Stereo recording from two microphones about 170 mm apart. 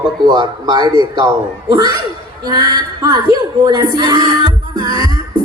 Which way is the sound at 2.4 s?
25° right (ahead or behind).